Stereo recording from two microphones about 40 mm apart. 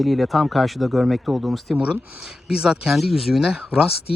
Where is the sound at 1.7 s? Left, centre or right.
Right.